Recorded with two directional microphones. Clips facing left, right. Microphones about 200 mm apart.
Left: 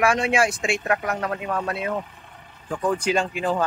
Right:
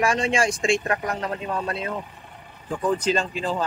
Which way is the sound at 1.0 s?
30° right (ahead or behind).